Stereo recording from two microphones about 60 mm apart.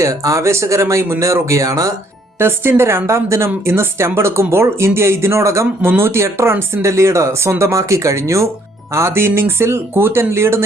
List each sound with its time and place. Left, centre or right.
0.0 s speech: right
2.4 s a woman's voice: right